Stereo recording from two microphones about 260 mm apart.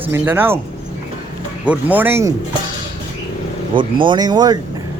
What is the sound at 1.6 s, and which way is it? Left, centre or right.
Speech, centre.